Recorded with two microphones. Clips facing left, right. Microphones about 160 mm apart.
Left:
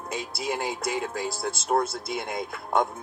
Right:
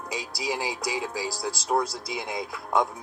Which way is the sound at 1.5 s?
25° left (ahead or behind).